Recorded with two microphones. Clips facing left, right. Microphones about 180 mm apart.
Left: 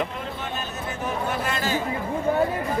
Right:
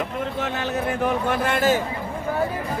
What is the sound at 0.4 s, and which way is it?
Speech, 75° right (ahead or behind).